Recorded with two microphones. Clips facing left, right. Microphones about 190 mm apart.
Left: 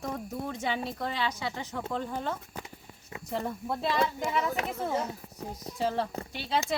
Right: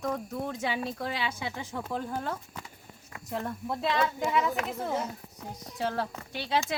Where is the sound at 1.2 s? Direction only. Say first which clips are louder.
Left 2 dB; 10° right (ahead or behind).